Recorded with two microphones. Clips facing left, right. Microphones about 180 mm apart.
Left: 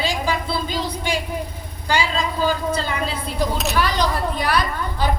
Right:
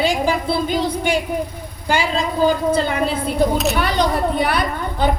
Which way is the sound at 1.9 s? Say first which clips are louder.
Right 2 dB; 55° right (ahead or behind).